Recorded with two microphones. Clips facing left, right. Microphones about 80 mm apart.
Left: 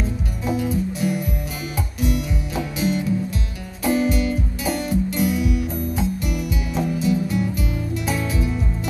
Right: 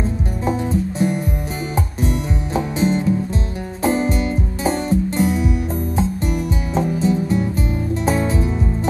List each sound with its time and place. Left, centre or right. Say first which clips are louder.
0.5 s music: right 2 dB; right